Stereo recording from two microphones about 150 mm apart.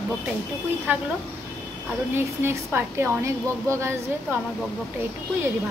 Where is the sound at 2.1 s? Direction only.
15° right (ahead or behind).